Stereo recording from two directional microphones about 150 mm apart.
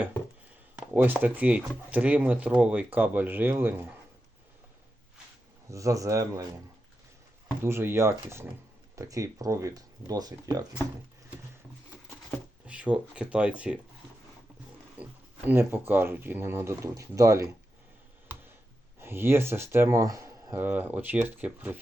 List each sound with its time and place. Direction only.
0.8 s speech: 10° right (ahead or behind)
5.7 s speech: 20° right (ahead or behind)
7.6 s speech: 15° right (ahead or behind)
12.6 s speech: 10° right (ahead or behind)
15.4 s speech: 10° right (ahead or behind)
18.9 s speech: 15° right (ahead or behind)